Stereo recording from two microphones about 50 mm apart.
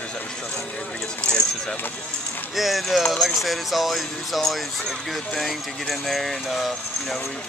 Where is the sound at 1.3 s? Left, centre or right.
Centre.